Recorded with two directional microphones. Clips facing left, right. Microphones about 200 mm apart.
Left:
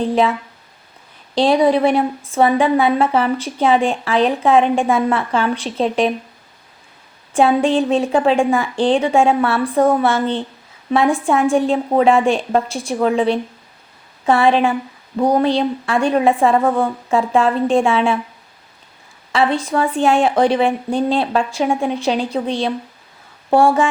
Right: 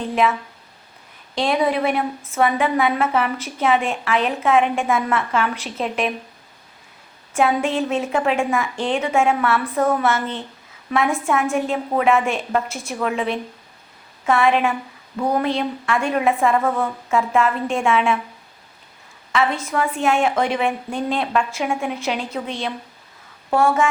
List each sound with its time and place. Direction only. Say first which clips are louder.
0.0 s a woman's voice: left 4 dB; 30° left (ahead or behind)
1.4 s a woman's voice: left 6 dB; 30° left (ahead or behind)
7.3 s a woman's voice: left 5 dB; 30° left (ahead or behind)
19.3 s a woman's voice: left 4 dB; 30° left (ahead or behind)